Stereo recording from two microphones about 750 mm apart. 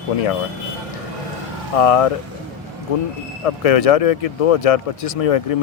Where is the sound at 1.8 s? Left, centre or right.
Left.